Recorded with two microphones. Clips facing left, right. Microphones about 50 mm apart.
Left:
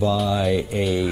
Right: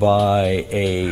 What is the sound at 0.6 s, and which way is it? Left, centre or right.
Speech, right.